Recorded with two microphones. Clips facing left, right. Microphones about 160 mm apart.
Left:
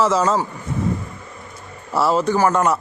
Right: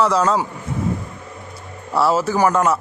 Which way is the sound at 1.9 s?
Centre (ahead or behind).